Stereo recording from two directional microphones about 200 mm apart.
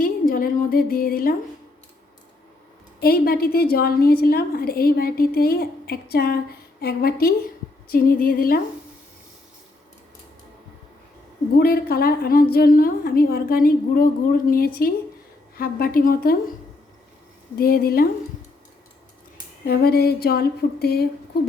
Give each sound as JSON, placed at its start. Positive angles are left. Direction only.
{"t": 0.0, "sound": "a sound", "side_deg": 45}
{"t": 3.0, "sound": "a woman's voice", "side_deg": 50}
{"t": 11.5, "sound": "a woman's voice", "side_deg": 50}
{"t": 17.6, "sound": "a woman's voice", "side_deg": 50}
{"t": 19.6, "sound": "a woman's voice", "side_deg": 50}